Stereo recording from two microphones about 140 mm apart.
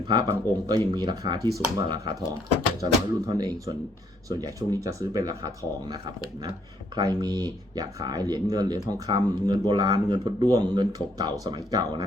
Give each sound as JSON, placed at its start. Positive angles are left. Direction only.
{"t": 0.0, "sound": "speech", "side_deg": -30}